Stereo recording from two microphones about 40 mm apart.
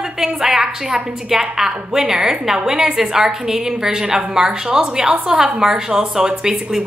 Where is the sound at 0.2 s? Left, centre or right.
Centre.